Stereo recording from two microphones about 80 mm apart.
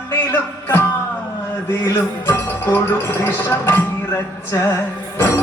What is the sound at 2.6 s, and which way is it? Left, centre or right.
Speech, left.